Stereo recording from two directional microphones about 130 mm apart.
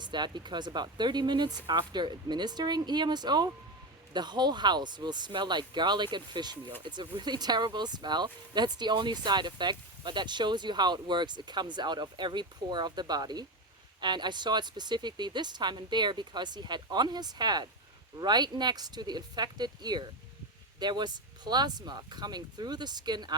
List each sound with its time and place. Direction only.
0.0 s speech: 35° right (ahead or behind)